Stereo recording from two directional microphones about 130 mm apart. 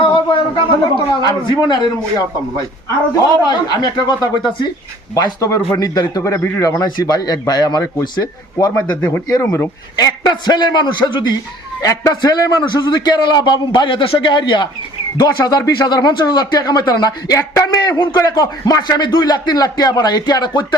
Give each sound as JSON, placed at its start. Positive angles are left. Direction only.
{"t": 0.1, "sound": "a sound", "side_deg": 40}
{"t": 1.2, "sound": "speech", "side_deg": 35}
{"t": 3.4, "sound": "a man's voice", "side_deg": 35}
{"t": 8.9, "sound": "a man's voice", "side_deg": 15}
{"t": 10.2, "sound": "speech", "side_deg": 35}